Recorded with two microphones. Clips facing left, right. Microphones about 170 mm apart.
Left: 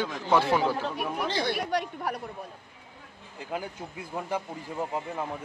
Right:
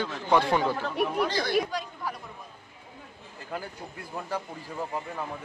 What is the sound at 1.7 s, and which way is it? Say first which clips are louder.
Speech: left 4 dB; 65° left (ahead or behind).